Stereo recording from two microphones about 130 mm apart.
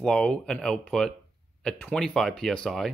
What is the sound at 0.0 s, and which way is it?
Speech, 5° left (ahead or behind).